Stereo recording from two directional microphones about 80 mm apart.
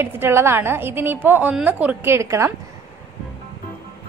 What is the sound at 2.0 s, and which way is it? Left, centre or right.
Speech, right.